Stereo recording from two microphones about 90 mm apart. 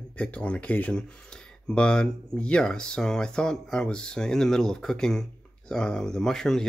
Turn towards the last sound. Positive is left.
turn(degrees=5)  # may be behind; listen again after turning